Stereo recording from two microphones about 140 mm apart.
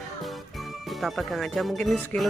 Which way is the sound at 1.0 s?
Centre (ahead or behind).